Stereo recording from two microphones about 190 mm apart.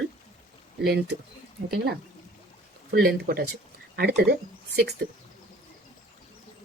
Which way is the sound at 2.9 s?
55° right (ahead or behind).